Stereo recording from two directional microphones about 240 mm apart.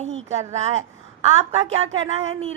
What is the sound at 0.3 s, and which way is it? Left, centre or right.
A woman's voice, right.